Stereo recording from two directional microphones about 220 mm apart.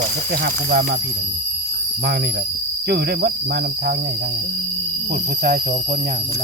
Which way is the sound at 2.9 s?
45° right (ahead or behind).